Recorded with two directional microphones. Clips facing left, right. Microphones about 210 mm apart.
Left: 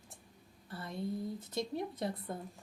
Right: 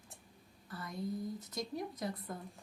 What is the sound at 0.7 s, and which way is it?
Speech, 30° left (ahead or behind).